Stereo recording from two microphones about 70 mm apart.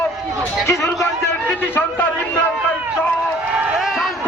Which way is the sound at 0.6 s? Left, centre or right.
Left.